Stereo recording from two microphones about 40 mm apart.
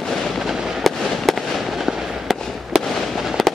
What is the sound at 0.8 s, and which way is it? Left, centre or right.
Fireworks, centre.